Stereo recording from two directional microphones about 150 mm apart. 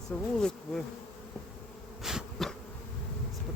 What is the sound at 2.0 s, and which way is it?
Bee, centre (ahead or behind).